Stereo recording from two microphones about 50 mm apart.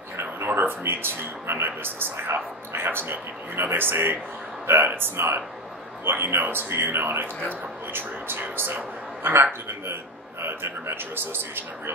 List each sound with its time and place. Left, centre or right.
0.2 s speech: right